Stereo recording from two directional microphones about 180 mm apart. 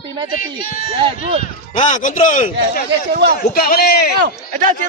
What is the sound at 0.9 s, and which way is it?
Speech, 30° right (ahead or behind).